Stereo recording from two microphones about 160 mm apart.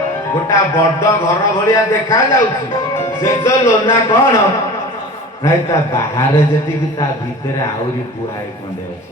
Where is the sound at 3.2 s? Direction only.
15° left (ahead or behind).